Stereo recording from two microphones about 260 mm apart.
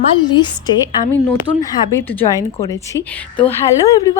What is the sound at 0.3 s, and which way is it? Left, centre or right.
Speech, centre.